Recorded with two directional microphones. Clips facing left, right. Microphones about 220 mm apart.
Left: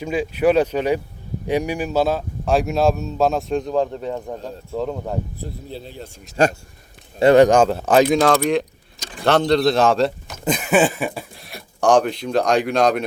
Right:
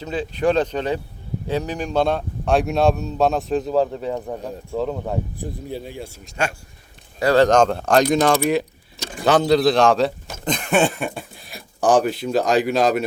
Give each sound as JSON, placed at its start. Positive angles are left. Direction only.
{"t": 0.0, "sound": "speech", "side_deg": 10}
{"t": 4.4, "sound": "speech", "side_deg": -15}
{"t": 4.8, "sound": "speech", "side_deg": 0}
{"t": 5.4, "sound": "speech", "side_deg": -15}
{"t": 6.3, "sound": "speech", "side_deg": 40}
{"t": 7.2, "sound": "speech", "side_deg": 20}
{"t": 7.4, "sound": "speech", "side_deg": 5}